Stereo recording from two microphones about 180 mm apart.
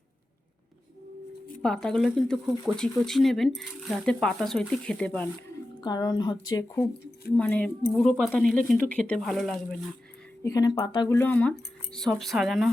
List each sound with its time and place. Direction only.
1.6 s speech: 5° left (ahead or behind)
5.8 s speech: 20° left (ahead or behind)
7.3 s speech: 5° left (ahead or behind)
10.4 s speech: 20° left (ahead or behind)
11.2 s speech: 10° left (ahead or behind)